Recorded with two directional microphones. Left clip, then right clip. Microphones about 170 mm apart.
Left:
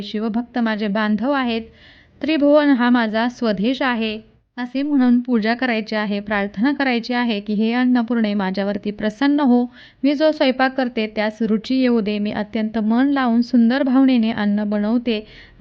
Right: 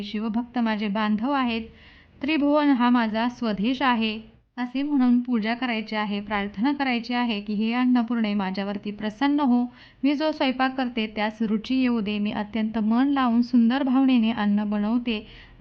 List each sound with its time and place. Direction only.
0.3 s a woman's voice: 20° left (ahead or behind)